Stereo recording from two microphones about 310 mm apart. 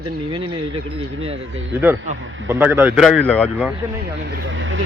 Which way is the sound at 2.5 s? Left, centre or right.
Centre.